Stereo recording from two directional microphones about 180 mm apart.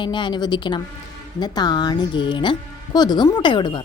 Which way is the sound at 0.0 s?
25° left (ahead or behind).